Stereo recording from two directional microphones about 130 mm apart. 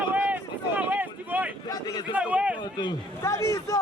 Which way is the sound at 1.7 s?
30° left (ahead or behind).